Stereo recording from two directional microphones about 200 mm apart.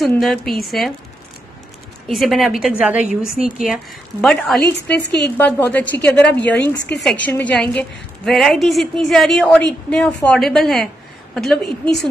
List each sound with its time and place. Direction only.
0.0 s a woman's voice: centre (ahead or behind)
2.0 s a woman's voice: centre (ahead or behind)
5.0 s a woman's voice: 55° left (ahead or behind)
5.4 s a woman's voice: 10° left (ahead or behind)